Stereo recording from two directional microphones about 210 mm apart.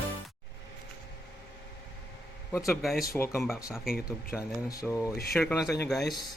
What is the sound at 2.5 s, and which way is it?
Speech, 15° left (ahead or behind).